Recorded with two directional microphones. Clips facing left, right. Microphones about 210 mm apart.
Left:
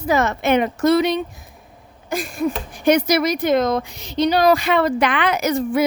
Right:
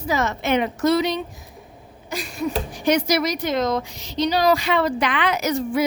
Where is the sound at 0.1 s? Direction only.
55° left (ahead or behind).